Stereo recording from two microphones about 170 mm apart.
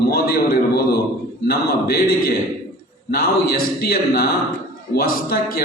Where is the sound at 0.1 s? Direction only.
65° left (ahead or behind).